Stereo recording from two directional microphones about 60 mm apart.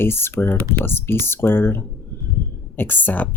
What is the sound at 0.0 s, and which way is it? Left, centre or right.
A woman's voice, left.